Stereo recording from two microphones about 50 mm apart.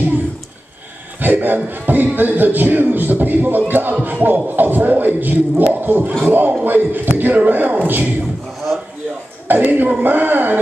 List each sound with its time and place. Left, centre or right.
1.2 s a man's voice: right
9.5 s a man's voice: right